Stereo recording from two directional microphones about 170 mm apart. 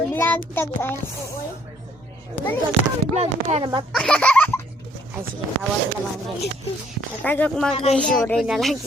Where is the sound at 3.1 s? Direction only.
40° right (ahead or behind).